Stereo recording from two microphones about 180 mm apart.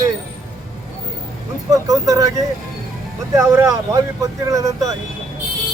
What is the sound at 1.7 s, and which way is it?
Speech, 20° right (ahead or behind).